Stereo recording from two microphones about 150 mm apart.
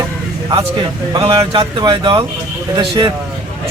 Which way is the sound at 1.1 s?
35° right (ahead or behind).